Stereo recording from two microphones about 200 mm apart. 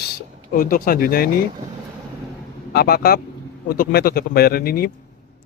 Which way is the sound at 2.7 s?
50° left (ahead or behind).